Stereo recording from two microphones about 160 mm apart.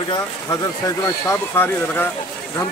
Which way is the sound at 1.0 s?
15° left (ahead or behind).